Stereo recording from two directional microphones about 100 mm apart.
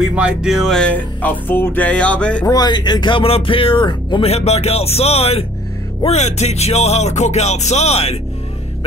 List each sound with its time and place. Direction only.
0.0 s music: 10° right (ahead or behind)
0.9 s music: 20° left (ahead or behind)
2.4 s speech: 40° left (ahead or behind)
4.2 s music: 90° left